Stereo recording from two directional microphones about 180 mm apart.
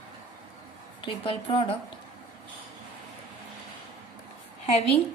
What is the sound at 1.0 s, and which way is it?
Speech, 30° left (ahead or behind).